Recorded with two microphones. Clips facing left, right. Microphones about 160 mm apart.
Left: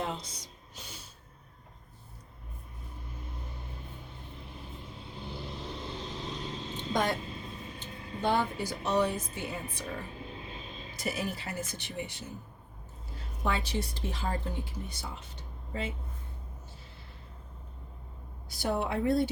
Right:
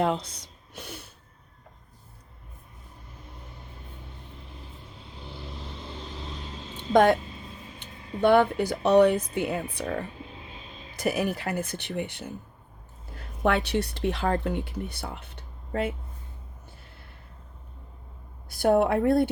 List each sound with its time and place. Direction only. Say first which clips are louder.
0.0 s speech: right 10 dB; 60° right (ahead or behind)
0.7 s a sound: right 9 dB; 60° right (ahead or behind)
6.9 s speech: right 11 dB; 60° right (ahead or behind)
13.4 s speech: right 8 dB; 65° right (ahead or behind)
18.4 s speech: right 10 dB; 55° right (ahead or behind)